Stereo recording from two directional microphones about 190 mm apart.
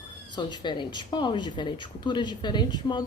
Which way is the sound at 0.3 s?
25° left (ahead or behind).